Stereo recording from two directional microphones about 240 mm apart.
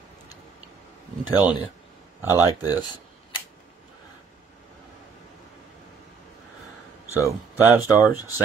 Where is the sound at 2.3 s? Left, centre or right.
Centre.